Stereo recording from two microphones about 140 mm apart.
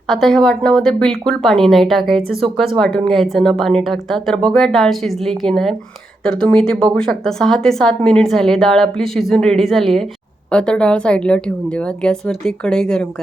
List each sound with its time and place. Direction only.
0.1 s a woman's voice: centre (ahead or behind)